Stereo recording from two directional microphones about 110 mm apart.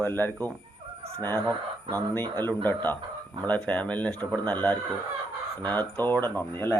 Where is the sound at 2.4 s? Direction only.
20° left (ahead or behind).